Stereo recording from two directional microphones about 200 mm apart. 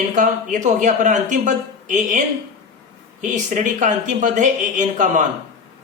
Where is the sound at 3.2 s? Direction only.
40° right (ahead or behind).